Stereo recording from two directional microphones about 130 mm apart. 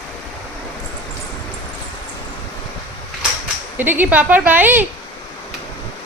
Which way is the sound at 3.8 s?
15° right (ahead or behind).